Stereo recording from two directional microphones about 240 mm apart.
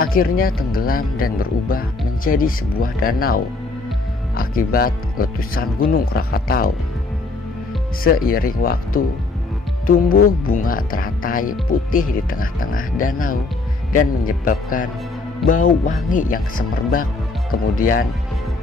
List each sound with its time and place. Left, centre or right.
0.0 s speech: left
8.0 s speech: left